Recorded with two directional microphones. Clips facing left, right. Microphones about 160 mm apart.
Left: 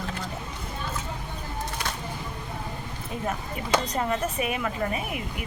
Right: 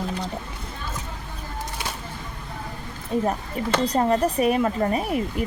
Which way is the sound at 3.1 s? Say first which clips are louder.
Right 7 dB; 35° right (ahead or behind).